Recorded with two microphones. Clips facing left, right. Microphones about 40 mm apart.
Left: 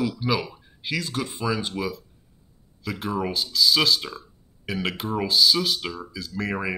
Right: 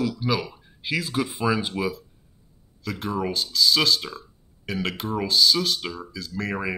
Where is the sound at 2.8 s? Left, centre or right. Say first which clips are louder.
Even; centre.